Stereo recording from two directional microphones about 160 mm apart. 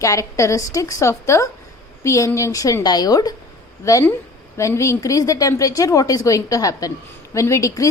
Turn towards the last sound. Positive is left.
turn(degrees=20)  # may be behind; listen again after turning